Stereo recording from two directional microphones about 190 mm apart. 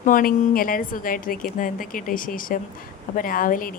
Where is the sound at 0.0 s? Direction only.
45° left (ahead or behind).